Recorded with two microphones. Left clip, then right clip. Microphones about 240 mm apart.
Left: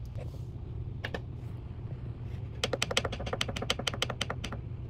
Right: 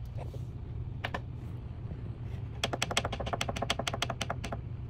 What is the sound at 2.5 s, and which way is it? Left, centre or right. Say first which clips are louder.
Typing: left 1 dB; centre.